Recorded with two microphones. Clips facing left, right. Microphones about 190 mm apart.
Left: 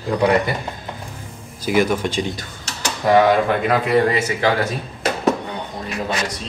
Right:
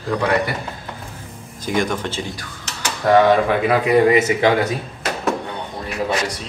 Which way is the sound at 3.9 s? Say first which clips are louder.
Right 6 dB; 20° right (ahead or behind).